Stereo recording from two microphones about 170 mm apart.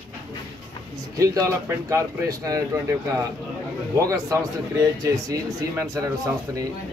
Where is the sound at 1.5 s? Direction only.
15° right (ahead or behind).